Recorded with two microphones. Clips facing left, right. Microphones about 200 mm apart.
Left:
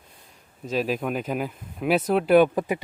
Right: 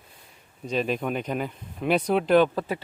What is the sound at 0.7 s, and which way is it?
Speech, 5° left (ahead or behind).